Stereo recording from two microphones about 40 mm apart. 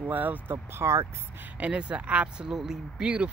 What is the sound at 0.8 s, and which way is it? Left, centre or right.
Speech, right.